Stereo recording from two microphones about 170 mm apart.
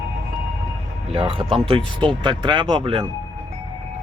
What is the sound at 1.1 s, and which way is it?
Speech, 30° right (ahead or behind).